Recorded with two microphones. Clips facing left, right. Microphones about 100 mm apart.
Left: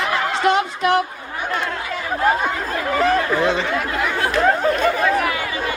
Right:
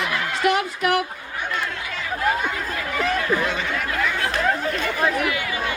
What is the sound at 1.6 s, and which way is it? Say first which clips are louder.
Chatter: left 4 dB; 45° left (ahead or behind).